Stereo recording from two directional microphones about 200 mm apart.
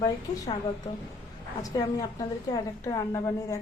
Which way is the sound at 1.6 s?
20° left (ahead or behind).